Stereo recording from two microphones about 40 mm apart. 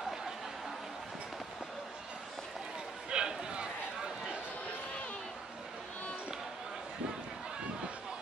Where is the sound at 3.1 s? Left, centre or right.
Right.